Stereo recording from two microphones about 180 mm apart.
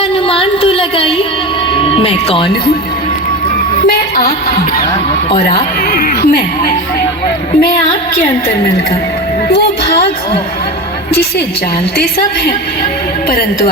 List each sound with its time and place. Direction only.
0.0 s a sound: 30° left (ahead or behind)
1.7 s music: 30° left (ahead or behind)
5.9 s a woman's voice: 60° left (ahead or behind)
11.1 s a woman's voice: 65° left (ahead or behind)